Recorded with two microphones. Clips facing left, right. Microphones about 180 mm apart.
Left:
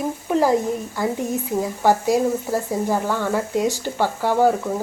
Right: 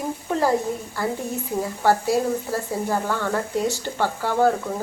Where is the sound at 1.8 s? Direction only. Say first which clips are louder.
Left 2 dB; 15° left (ahead or behind).